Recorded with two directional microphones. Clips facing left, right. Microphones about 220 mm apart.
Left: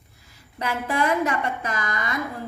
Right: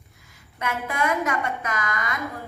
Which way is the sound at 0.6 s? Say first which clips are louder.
Left 2 dB; 30° left (ahead or behind).